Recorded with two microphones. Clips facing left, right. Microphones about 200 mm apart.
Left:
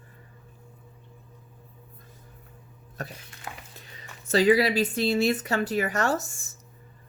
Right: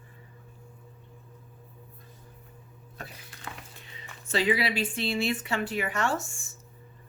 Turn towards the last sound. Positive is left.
turn(degrees=40)  # may be behind; listen again after turning